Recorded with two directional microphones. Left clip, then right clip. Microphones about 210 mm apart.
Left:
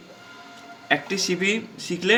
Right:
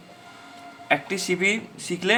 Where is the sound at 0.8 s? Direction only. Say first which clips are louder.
Even; 15° right (ahead or behind).